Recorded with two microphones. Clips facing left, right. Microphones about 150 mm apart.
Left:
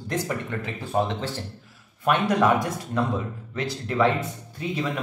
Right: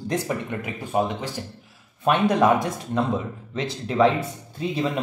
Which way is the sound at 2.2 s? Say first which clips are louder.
Right 3 dB; 20° right (ahead or behind).